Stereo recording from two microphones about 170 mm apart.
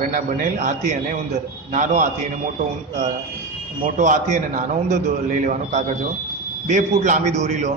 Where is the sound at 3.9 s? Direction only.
45° right (ahead or behind).